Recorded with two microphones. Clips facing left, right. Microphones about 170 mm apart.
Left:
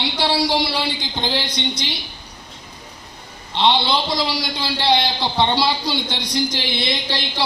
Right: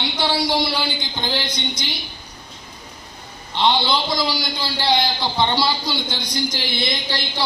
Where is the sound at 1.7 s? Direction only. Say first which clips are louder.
Left 2 dB; 70° left (ahead or behind).